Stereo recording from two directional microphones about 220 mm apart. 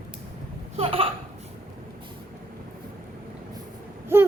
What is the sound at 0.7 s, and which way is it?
Hiccup, 25° right (ahead or behind).